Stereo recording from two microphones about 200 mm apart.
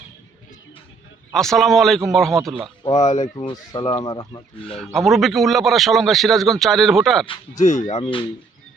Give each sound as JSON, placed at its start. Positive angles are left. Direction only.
{"t": 1.3, "sound": "a man's voice", "side_deg": 0}
{"t": 2.9, "sound": "speech", "side_deg": 35}
{"t": 3.3, "sound": "speech", "side_deg": 20}
{"t": 4.9, "sound": "a man's voice", "side_deg": 0}
{"t": 7.6, "sound": "speech", "side_deg": 35}